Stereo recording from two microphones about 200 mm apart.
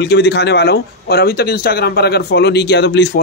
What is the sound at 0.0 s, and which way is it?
Speech, 55° left (ahead or behind).